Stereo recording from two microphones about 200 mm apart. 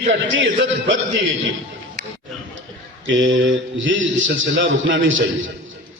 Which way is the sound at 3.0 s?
70° right (ahead or behind).